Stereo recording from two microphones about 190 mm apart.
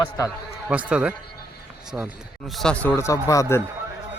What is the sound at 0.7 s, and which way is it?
A man's voice, 5° right (ahead or behind).